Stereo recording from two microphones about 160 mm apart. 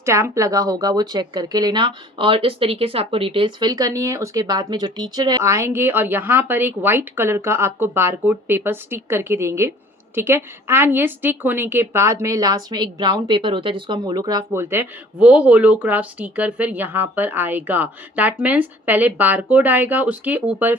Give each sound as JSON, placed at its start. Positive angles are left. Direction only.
{"t": 0.0, "sound": "a woman's voice", "side_deg": -15}